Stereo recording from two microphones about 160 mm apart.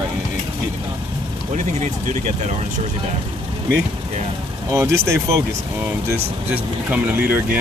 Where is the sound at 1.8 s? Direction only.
45° right (ahead or behind).